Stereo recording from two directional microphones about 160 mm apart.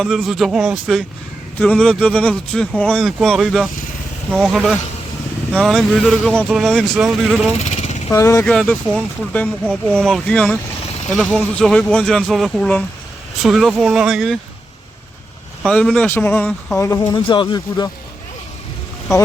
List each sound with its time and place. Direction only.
0.0 s speech: centre (ahead or behind)
7.6 s vehicle: 45° left (ahead or behind)
8.1 s speech: 15° left (ahead or behind)
8.4 s speech: 5° left (ahead or behind)
15.6 s speech: 5° left (ahead or behind)
16.7 s speech: 20° left (ahead or behind)
17.2 s speech: 30° left (ahead or behind)